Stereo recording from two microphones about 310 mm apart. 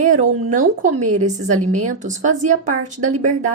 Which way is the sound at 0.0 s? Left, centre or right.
Right.